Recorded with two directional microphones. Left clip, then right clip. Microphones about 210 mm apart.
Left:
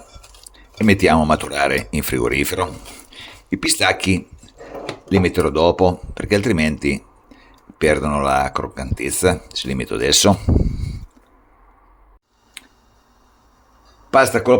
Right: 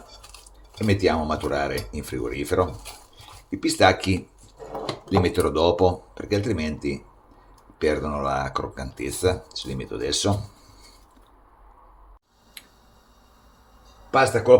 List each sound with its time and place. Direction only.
0.4 s speech: 35° left (ahead or behind)
7.8 s speech: 30° left (ahead or behind)
12.6 s tick: 20° left (ahead or behind)
14.1 s speech: 55° left (ahead or behind)